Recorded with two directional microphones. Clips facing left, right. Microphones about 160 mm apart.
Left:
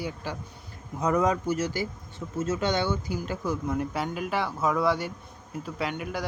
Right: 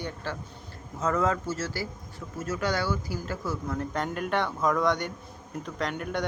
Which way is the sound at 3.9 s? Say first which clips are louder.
Right 1 dB; 5° left (ahead or behind).